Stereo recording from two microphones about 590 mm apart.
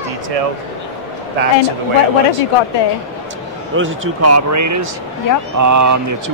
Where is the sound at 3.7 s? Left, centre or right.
Centre.